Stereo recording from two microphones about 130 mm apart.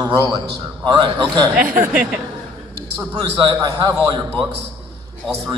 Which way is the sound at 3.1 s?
30° right (ahead or behind).